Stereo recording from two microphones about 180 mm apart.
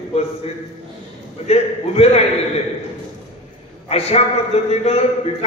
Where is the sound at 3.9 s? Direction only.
35° left (ahead or behind).